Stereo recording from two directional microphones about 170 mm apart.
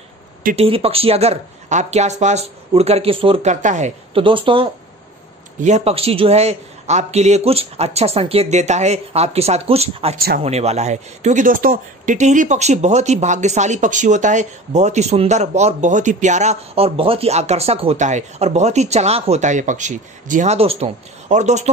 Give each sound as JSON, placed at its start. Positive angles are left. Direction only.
{"t": 0.6, "sound": "a man's voice", "side_deg": -35}
{"t": 3.6, "sound": "speech", "side_deg": -45}
{"t": 4.1, "sound": "a man's voice", "side_deg": -30}
{"t": 5.6, "sound": "a man's voice", "side_deg": -40}
{"t": 10.1, "sound": "speech", "side_deg": -60}
{"t": 10.4, "sound": "speech", "side_deg": -40}